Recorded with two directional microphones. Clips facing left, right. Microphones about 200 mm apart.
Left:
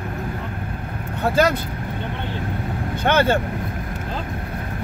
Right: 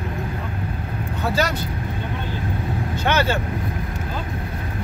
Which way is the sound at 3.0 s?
55° left (ahead or behind).